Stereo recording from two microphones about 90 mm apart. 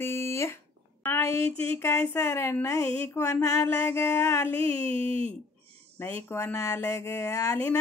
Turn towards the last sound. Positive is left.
turn(degrees=30)  # may be behind; listen again after turning